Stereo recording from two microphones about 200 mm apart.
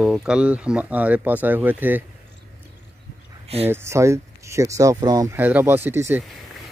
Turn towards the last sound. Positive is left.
turn(degrees=-10)  # may be behind; listen again after turning